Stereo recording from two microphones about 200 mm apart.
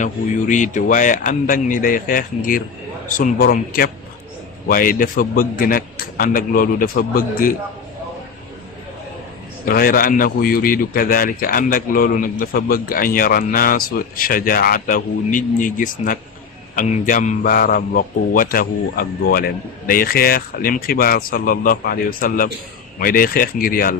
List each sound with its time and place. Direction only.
0.0 s a man's voice: 40° left (ahead or behind)
9.6 s a man's voice: 45° left (ahead or behind)